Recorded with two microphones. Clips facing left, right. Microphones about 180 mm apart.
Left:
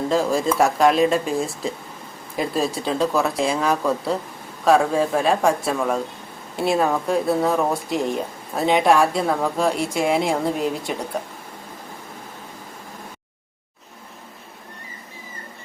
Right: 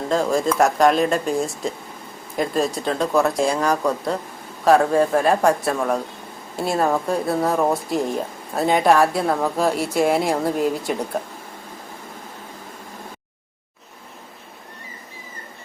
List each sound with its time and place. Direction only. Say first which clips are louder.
0.1 s speech: right 2 dB; centre (ahead or behind)